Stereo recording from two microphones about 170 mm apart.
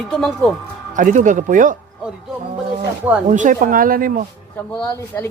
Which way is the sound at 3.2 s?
50° right (ahead or behind).